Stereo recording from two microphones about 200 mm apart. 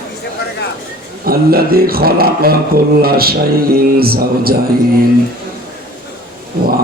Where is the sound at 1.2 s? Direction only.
50° right (ahead or behind).